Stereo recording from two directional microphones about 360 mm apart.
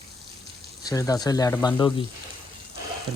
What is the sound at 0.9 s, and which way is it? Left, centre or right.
Speech, centre.